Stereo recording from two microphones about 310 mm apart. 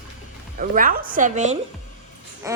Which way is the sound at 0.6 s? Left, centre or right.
Right.